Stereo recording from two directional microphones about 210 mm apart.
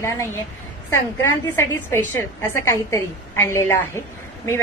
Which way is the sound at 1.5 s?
10° left (ahead or behind).